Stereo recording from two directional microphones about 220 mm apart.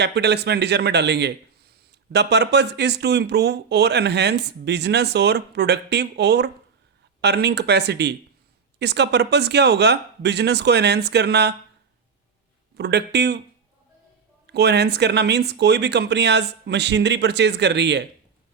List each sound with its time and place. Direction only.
0.0 s a man's voice: 50° right (ahead or behind)
12.7 s a man's voice: 50° right (ahead or behind)
14.4 s a man's voice: 50° right (ahead or behind)